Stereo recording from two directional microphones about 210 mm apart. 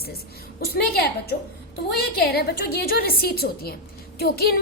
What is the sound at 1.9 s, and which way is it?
A woman's voice, 50° left (ahead or behind).